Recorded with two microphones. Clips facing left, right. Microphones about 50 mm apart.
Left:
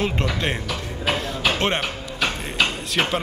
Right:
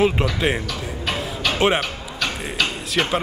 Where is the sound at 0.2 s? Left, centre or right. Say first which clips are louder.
Right 3 dB; centre.